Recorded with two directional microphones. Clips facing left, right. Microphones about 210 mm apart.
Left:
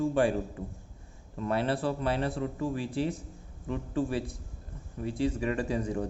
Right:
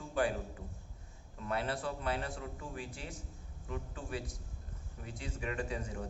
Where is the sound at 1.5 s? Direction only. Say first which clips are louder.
Left 7 dB; 30° left (ahead or behind).